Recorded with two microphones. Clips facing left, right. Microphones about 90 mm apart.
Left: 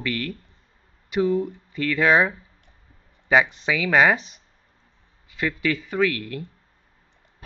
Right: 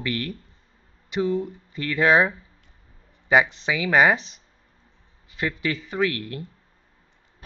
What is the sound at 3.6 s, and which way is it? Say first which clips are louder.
Speech: even; 5° right (ahead or behind).